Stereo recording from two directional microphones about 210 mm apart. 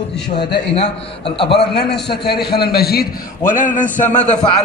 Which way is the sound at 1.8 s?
50° left (ahead or behind).